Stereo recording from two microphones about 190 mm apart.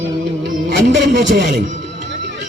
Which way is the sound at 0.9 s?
65° right (ahead or behind).